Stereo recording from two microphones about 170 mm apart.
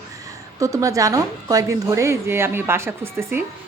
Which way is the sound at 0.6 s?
20° right (ahead or behind).